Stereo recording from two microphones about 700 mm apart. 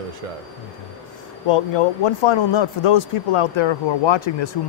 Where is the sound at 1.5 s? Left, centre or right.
Left.